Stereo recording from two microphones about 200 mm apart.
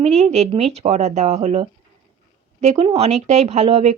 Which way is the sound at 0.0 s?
35° right (ahead or behind).